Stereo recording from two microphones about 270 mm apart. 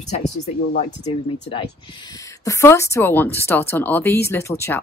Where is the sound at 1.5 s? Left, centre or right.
Centre.